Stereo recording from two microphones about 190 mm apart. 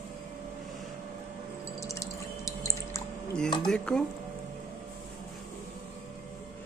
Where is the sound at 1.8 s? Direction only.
15° left (ahead or behind).